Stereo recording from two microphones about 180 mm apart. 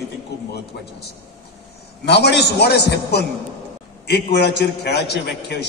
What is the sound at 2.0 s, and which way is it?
A man's voice, 70° left (ahead or behind).